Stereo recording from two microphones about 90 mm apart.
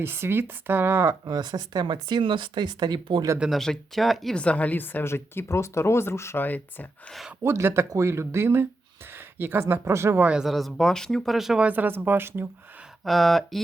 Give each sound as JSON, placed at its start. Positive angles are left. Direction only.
{"t": 0.0, "sound": "speech", "side_deg": -25}
{"t": 3.5, "sound": "speech", "side_deg": 5}
{"t": 4.4, "sound": "speech", "side_deg": 15}
{"t": 7.4, "sound": "speech", "side_deg": -30}
{"t": 10.2, "sound": "speech", "side_deg": -5}
{"t": 11.6, "sound": "speech", "side_deg": -20}
{"t": 13.1, "sound": "speech", "side_deg": 0}